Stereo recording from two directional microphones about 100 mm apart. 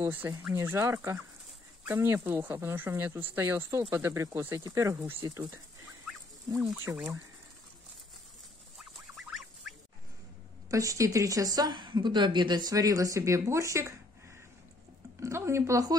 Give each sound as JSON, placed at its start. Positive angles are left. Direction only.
{"t": 0.0, "sound": "speech", "side_deg": -20}
{"t": 0.6, "sound": "a woman's voice", "side_deg": -30}
{"t": 6.8, "sound": "speech", "side_deg": -25}
{"t": 9.1, "sound": "goose", "side_deg": 0}
{"t": 10.7, "sound": "a woman's voice", "side_deg": -35}
{"t": 15.1, "sound": "speech", "side_deg": -30}